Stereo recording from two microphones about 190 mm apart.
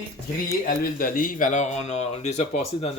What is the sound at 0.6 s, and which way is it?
Speech, 45° left (ahead or behind).